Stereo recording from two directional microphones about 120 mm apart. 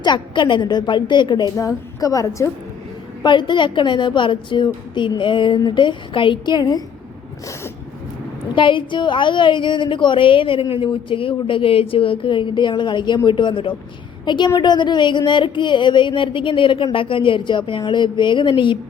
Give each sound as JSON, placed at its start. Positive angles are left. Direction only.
{"t": 0.0, "sound": "a woman's voice", "side_deg": 40}
{"t": 3.2, "sound": "a woman's voice", "side_deg": 40}
{"t": 8.5, "sound": "a woman's voice", "side_deg": 45}